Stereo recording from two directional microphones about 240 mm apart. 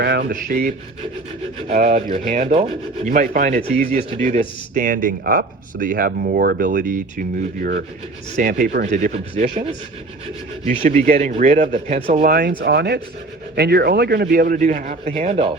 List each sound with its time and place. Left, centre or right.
0.0 s speech: right
1.5 s rub: right
3.9 s speech: right
10.8 s rub: right
12.2 s rub: right
13.6 s speech: right
15.1 s rub: right